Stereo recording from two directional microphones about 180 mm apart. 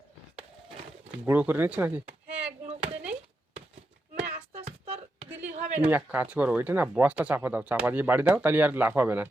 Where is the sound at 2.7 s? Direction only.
35° right (ahead or behind).